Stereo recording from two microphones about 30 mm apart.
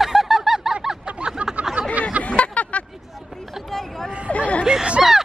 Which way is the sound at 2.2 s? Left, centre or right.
Left.